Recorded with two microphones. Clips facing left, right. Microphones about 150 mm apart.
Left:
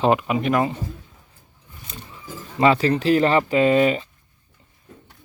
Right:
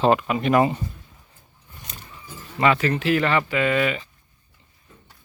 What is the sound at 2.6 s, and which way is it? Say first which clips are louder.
Speech: left 3 dB; 30° left (ahead or behind).